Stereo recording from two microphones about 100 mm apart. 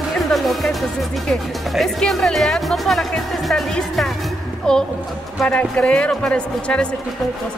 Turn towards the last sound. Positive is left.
turn(degrees=10)  # may be behind; listen again after turning